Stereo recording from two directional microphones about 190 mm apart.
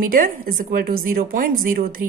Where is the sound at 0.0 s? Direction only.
45° right (ahead or behind).